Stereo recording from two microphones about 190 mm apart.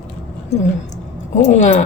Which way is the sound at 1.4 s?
40° left (ahead or behind).